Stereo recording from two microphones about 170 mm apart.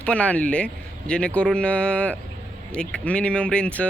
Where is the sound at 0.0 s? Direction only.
5° left (ahead or behind).